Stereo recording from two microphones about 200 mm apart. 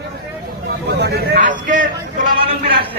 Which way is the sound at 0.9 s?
60° right (ahead or behind).